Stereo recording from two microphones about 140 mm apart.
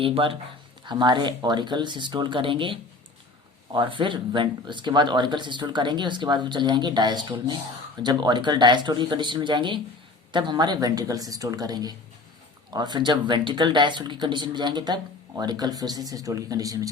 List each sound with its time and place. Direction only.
0.0 s speech: 40° right (ahead or behind)